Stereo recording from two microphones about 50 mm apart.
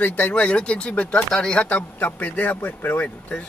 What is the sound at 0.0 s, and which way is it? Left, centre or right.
A man's voice, left.